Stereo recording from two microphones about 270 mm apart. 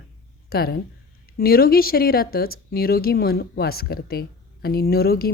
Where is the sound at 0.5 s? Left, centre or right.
Left.